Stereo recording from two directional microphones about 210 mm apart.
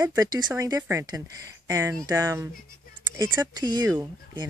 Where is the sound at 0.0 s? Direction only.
15° right (ahead or behind).